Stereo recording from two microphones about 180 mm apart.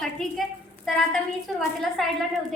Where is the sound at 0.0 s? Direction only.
5° left (ahead or behind).